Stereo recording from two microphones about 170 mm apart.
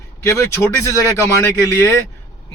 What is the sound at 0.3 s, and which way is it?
Speech, 15° left (ahead or behind).